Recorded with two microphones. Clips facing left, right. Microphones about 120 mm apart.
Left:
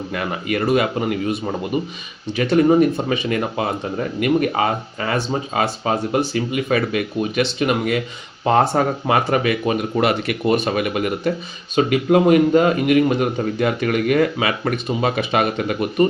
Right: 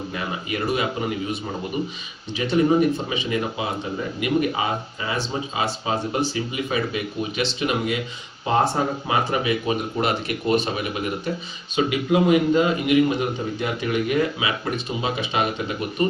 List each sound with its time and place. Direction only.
0.1 s a man's voice: 60° left (ahead or behind)
8.4 s a man's voice: 65° left (ahead or behind)
11.8 s a man's voice: 50° left (ahead or behind)